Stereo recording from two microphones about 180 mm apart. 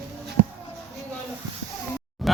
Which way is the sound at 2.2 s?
Centre (ahead or behind).